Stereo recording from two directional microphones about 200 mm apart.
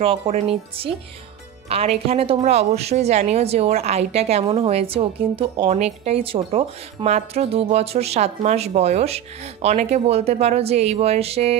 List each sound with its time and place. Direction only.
0.0 s a woman's voice: 30° right (ahead or behind)